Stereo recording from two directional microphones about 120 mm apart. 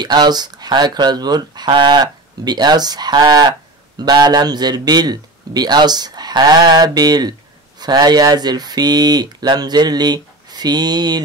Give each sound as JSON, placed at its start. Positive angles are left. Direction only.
{"t": 0.0, "sound": "speech", "side_deg": -35}